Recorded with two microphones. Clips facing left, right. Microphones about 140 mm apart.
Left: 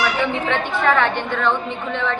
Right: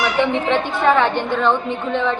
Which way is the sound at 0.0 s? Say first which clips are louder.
Right 3 dB; 15° right (ahead or behind).